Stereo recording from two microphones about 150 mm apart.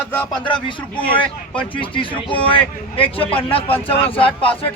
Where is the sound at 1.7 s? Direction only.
35° left (ahead or behind).